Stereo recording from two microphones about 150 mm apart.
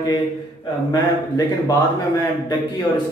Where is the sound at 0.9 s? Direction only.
25° left (ahead or behind).